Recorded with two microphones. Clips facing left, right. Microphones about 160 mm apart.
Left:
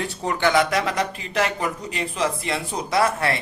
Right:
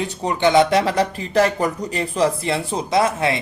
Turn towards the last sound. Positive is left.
turn(degrees=-20)  # may be behind; listen again after turning